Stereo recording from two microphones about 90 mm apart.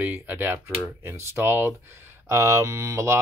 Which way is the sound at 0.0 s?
20° right (ahead or behind).